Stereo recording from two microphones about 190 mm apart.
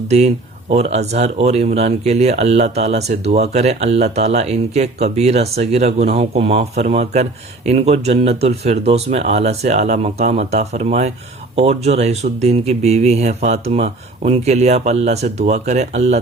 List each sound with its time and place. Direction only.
0.7 s speech: 35° right (ahead or behind)